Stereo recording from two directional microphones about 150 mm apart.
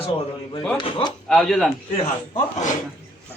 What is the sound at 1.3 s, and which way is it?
Speech, centre (ahead or behind).